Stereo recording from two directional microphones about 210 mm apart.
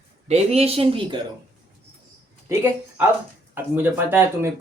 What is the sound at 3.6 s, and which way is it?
Speech, 10° right (ahead or behind).